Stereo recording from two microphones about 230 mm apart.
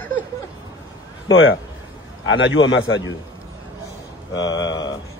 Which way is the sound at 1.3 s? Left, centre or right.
Left.